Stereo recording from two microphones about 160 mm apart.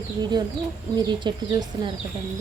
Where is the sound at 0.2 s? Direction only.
25° right (ahead or behind).